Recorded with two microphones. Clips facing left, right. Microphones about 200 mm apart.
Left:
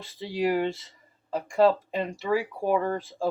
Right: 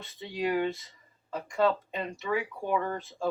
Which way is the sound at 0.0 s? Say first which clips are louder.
Left 5 dB; 30° left (ahead or behind).